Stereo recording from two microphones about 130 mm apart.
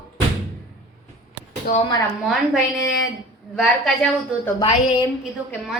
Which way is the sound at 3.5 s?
Centre (ahead or behind).